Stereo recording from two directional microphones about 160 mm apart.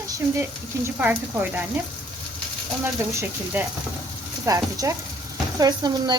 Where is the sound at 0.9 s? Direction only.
10° right (ahead or behind).